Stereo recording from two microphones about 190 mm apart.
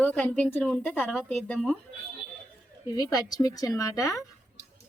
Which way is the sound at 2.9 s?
20° left (ahead or behind).